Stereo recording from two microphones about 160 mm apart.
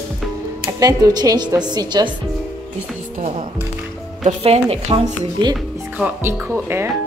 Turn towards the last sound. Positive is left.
turn(degrees=-15)  # may be behind; listen again after turning